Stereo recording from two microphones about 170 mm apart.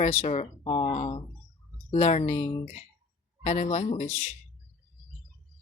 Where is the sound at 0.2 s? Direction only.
35° left (ahead or behind).